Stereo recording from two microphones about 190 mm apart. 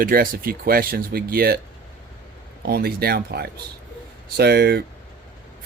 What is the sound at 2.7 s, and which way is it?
Speech, 55° right (ahead or behind).